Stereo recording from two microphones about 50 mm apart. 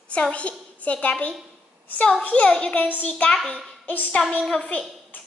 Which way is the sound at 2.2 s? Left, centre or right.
Left.